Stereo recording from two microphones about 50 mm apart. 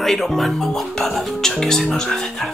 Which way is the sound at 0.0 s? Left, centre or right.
Centre.